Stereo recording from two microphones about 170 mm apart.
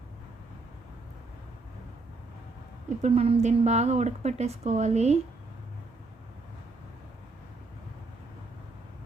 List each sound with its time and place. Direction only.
3.0 s a woman's voice: 40° right (ahead or behind)